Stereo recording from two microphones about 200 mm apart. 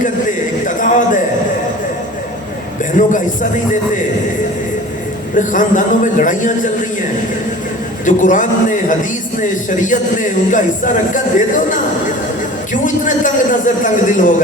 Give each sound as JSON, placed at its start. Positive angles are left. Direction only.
{"t": 0.8, "sound": "a sound", "side_deg": 40}
{"t": 3.0, "sound": "a man's voice", "side_deg": 40}
{"t": 5.3, "sound": "a man's voice", "side_deg": 40}
{"t": 8.0, "sound": "a man's voice", "side_deg": 40}
{"t": 9.6, "sound": "a man's voice", "side_deg": 40}
{"t": 12.7, "sound": "a man's voice", "side_deg": 40}